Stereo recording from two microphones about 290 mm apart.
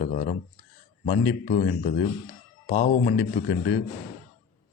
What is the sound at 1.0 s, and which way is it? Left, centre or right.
Speech, left.